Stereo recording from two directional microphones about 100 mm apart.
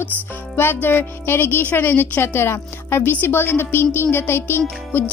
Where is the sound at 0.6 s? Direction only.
20° left (ahead or behind).